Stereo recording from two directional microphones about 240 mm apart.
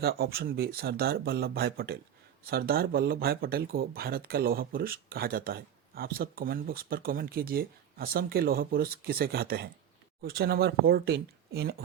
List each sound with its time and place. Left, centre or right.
0.0 s speech: right